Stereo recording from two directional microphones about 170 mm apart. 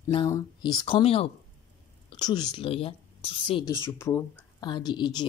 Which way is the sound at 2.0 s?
25° left (ahead or behind).